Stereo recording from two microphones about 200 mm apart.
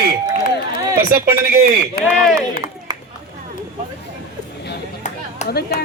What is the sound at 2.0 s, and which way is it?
Speech, 50° left (ahead or behind).